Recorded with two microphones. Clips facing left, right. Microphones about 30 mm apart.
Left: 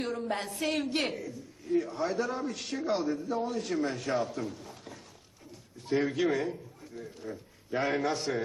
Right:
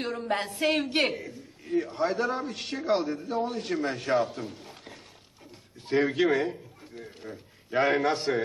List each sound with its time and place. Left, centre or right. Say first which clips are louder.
0.0 s a man's voice: right 3 dB; right
6.2 s a man's voice: right 4 dB; right
6.5 s a sound: even; right
7.8 s a man's voice: right 5 dB; right